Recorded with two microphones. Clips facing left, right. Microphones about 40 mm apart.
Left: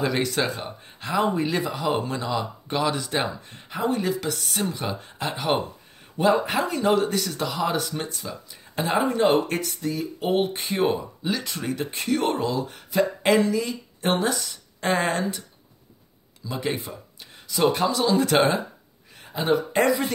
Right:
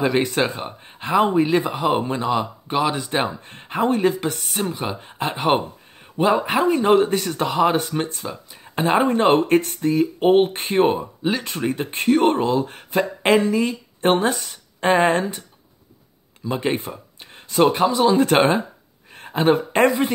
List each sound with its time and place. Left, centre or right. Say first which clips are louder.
0.0 s speech: right 4 dB; right
3.3 s speech: right 3 dB; right
4.5 s speech: right 3 dB; centre
16.4 s speech: right 5 dB; right
17.7 s speech: right 6 dB; right
18.1 s speech: right 4 dB; right
19.1 s speech: right 5 dB; right